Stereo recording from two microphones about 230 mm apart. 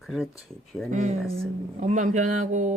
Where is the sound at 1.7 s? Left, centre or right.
Right.